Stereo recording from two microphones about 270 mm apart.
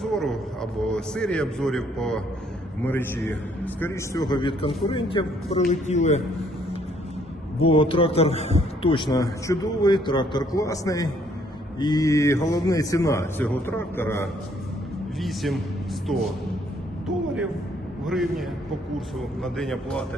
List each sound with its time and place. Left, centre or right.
0.0 s a man's voice: centre; by 6.2 s left
7.6 s a man's voice: centre
18.0 s a man's voice: centre
19.4 s a man's voice: centre